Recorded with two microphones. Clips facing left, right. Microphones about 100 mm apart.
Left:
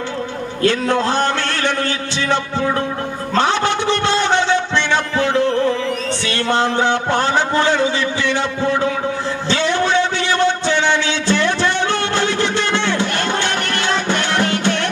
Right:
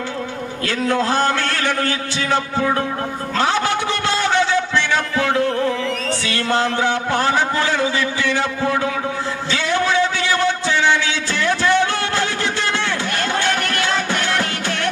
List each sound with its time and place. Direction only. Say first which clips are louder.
0.7 s a man's voice: left 3 dB; 25° left (ahead or behind)
9.5 s a sound: left 2 dB; 25° left (ahead or behind)
10.8 s music: left 1 dB; 25° left (ahead or behind)